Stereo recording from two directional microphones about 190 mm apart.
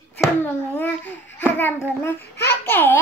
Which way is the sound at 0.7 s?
10° left (ahead or behind).